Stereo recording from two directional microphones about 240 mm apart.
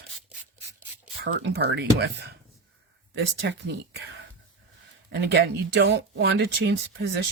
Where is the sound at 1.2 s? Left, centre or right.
Right.